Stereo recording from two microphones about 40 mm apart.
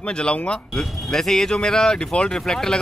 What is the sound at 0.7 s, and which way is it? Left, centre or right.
Speech, centre.